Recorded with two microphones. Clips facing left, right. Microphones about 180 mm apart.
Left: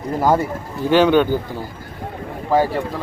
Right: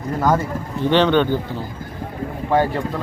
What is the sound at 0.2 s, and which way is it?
Speech, 25° left (ahead or behind).